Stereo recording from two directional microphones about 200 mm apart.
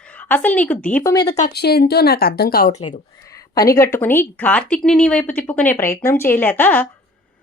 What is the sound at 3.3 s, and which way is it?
Speech, 15° left (ahead or behind).